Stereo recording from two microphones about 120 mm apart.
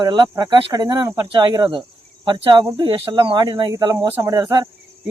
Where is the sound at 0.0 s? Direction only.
35° right (ahead or behind).